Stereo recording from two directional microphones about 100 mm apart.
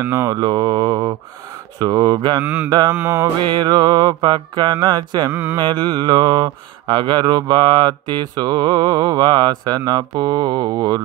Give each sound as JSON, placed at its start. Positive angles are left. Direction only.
{"t": 0.0, "sound": "mantra", "side_deg": -25}
{"t": 0.3, "sound": "mantra", "side_deg": -45}
{"t": 2.4, "sound": "mantra", "side_deg": -15}
{"t": 3.4, "sound": "mantra", "side_deg": -45}
{"t": 5.3, "sound": "mantra", "side_deg": -20}
{"t": 5.6, "sound": "mantra", "side_deg": -50}